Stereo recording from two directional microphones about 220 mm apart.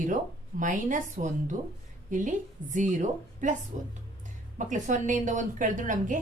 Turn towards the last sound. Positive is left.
turn(degrees=-35)  # may be behind; listen again after turning